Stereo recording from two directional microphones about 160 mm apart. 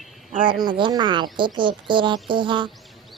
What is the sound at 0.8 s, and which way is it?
A woman's voice, 25° right (ahead or behind).